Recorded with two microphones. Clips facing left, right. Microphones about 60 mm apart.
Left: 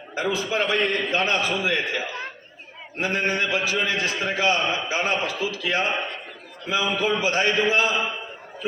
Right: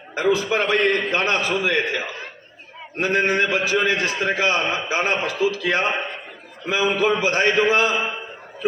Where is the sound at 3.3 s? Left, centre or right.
Right.